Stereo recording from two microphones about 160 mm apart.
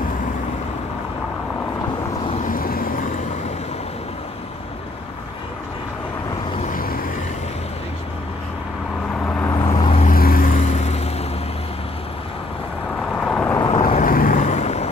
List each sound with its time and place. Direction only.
2.4 s vehicle: 65° left (ahead or behind)
6.7 s vehicle: 65° left (ahead or behind)
9.2 s vehicle: 10° left (ahead or behind)
9.6 s vehicle: 30° left (ahead or behind)
10.0 s vehicle: 65° left (ahead or behind)
10.6 s vehicle: 45° left (ahead or behind)
13.1 s vehicle: 5° left (ahead or behind)
13.6 s vehicle: 30° left (ahead or behind)
14.0 s vehicle: 60° left (ahead or behind)
14.4 s vehicle: 45° left (ahead or behind)